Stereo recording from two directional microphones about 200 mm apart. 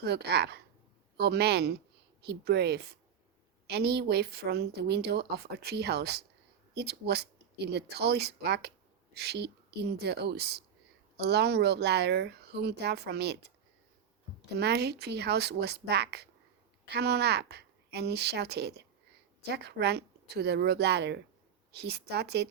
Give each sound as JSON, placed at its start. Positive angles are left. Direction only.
{"t": 0.0, "sound": "speech", "side_deg": -55}
{"t": 14.5, "sound": "speech", "side_deg": -55}